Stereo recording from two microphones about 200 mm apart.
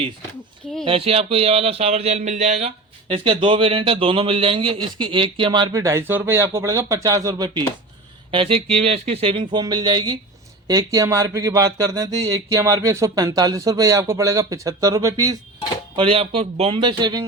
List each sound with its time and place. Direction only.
0.9 s speech: 30° right (ahead or behind)
16.0 s speech: 30° right (ahead or behind)